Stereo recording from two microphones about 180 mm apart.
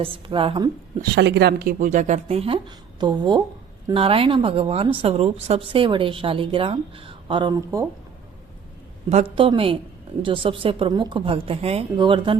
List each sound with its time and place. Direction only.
0.0 s speech: 30° right (ahead or behind)
1.1 s a woman's voice: 65° right (ahead or behind)
1.8 s a woman's voice: 45° right (ahead or behind); by 7.9 s 20° right (ahead or behind)
9.3 s speech: 30° right (ahead or behind)